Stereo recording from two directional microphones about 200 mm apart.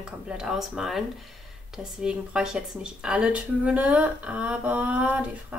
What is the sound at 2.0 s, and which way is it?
A woman's voice, 5° right (ahead or behind).